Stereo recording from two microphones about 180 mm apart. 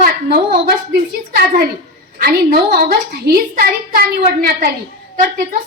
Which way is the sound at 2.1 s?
55° right (ahead or behind).